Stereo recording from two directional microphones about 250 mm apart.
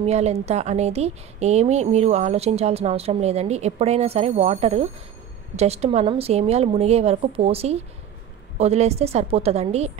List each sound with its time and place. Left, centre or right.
0.0 s speech: right